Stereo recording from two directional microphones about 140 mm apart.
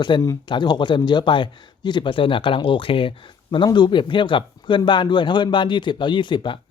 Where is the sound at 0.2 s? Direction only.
25° left (ahead or behind).